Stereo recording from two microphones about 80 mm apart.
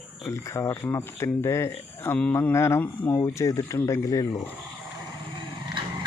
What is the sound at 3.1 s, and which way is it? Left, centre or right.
Speech, left.